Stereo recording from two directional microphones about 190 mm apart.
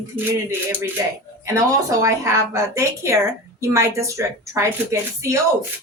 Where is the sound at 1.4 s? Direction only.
15° right (ahead or behind).